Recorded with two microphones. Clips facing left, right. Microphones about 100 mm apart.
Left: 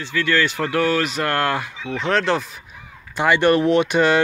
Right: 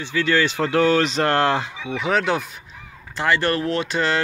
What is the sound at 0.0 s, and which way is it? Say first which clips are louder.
Speech: even; 20° right (ahead or behind).